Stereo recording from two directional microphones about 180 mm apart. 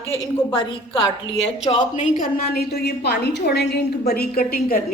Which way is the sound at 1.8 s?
45° left (ahead or behind).